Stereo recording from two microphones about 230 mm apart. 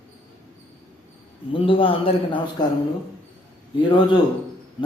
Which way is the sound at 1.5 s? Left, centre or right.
Left.